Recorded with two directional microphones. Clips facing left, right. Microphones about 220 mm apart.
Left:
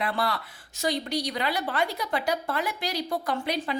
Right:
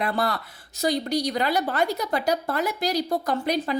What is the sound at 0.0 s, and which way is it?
A woman's voice, 45° right (ahead or behind).